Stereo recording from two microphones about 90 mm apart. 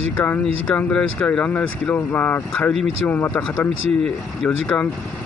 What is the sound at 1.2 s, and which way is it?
Speech, 20° left (ahead or behind).